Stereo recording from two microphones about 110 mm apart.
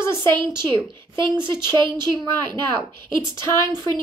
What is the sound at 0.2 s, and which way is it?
Speech, 45° right (ahead or behind).